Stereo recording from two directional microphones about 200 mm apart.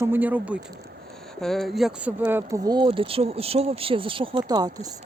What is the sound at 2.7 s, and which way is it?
Speech, 25° right (ahead or behind).